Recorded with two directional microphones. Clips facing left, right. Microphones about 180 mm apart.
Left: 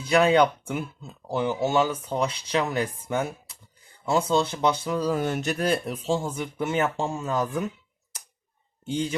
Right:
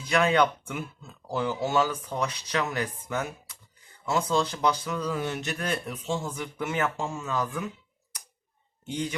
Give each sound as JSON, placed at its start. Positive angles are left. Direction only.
{"t": 0.0, "sound": "speech", "side_deg": 30}
{"t": 8.9, "sound": "speech", "side_deg": 25}